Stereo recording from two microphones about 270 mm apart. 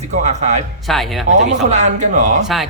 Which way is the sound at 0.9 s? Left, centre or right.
Centre.